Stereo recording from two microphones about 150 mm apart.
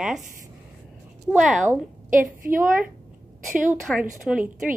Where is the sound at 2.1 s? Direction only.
65° right (ahead or behind).